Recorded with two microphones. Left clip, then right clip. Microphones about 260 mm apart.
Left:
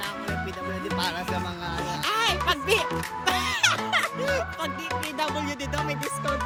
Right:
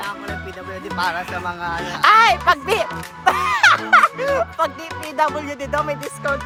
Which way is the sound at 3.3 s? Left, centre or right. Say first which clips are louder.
Right 9 dB; centre.